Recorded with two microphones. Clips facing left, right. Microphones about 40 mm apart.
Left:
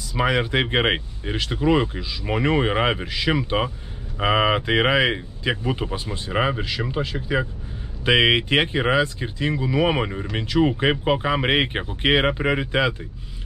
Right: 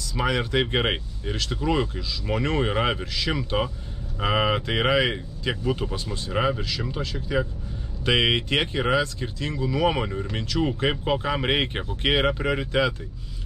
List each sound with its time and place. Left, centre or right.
0.1 s speech: left